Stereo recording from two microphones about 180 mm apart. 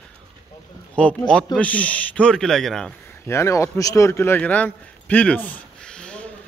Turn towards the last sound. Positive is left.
turn(degrees=5)  # may be behind; listen again after turning